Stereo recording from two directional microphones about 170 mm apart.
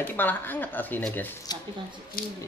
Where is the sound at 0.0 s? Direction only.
10° left (ahead or behind).